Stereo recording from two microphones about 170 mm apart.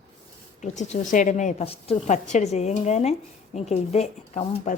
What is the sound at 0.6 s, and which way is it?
A woman's voice, 45° left (ahead or behind).